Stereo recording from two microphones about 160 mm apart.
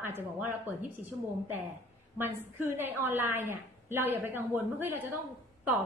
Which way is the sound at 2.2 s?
15° right (ahead or behind).